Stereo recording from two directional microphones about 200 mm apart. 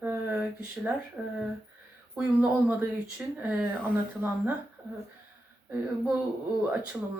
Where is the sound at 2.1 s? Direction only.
10° right (ahead or behind).